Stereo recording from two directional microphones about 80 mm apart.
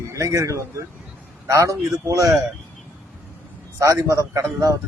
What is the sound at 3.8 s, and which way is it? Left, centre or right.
Speech, right.